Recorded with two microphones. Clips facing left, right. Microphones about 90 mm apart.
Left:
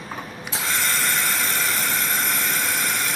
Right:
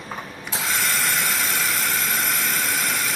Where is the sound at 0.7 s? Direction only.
Centre (ahead or behind).